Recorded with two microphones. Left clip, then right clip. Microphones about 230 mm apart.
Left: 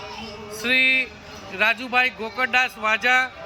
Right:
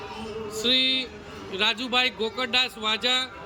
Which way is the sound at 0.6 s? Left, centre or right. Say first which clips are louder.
Left 4 dB; centre.